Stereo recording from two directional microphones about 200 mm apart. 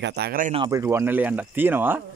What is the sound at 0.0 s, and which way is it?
Speech, 55° right (ahead or behind).